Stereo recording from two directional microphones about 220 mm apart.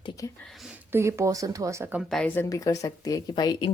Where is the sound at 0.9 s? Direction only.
10° right (ahead or behind).